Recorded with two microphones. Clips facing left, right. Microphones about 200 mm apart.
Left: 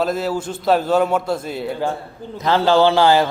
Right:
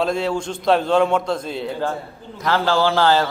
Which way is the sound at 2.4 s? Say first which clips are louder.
Left 4 dB; 20° left (ahead or behind).